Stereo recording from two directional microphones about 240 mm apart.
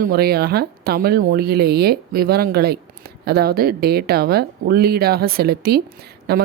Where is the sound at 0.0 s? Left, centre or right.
Right.